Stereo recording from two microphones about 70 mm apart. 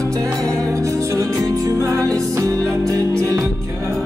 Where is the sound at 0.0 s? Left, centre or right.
Right.